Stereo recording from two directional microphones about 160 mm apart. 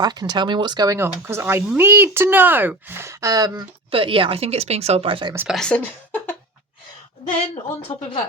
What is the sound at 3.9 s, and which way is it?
A woman's voice, 35° right (ahead or behind).